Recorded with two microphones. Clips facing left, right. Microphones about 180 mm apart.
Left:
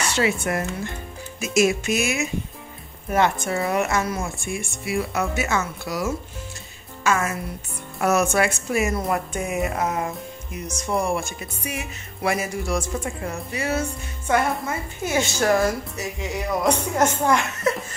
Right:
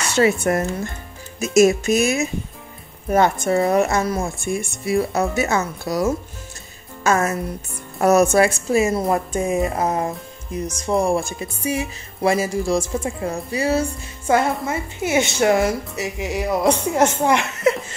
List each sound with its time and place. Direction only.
0.2 s a woman's voice: 40° right (ahead or behind); by 17.5 s 20° right (ahead or behind)